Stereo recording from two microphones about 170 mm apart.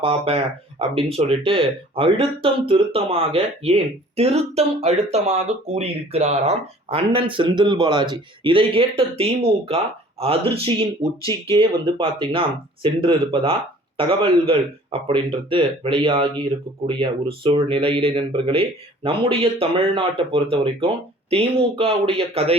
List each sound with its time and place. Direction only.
0.0 s speech: 35° right (ahead or behind)